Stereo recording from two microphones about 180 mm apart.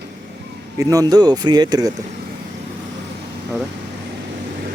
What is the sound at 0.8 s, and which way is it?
Speech, 20° right (ahead or behind).